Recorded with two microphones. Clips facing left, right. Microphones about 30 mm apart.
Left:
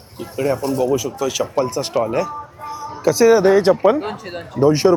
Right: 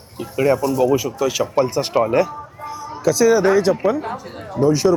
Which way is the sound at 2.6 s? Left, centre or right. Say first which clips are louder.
Even; centre.